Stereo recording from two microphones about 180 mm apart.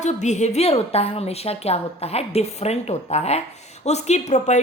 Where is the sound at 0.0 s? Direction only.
40° left (ahead or behind).